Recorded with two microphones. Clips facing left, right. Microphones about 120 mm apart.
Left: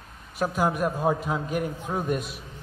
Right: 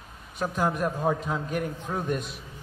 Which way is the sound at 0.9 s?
25° left (ahead or behind).